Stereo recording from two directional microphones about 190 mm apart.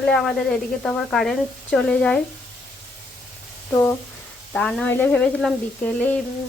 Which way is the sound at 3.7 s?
15° left (ahead or behind).